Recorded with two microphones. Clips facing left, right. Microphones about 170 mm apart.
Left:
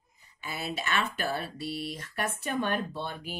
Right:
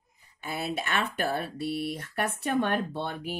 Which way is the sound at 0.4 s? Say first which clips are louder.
Right 3 dB; 55° right (ahead or behind).